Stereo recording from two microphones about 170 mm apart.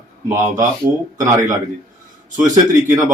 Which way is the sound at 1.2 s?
20° right (ahead or behind).